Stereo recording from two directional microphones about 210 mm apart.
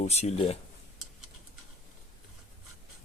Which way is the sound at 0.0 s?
30° left (ahead or behind).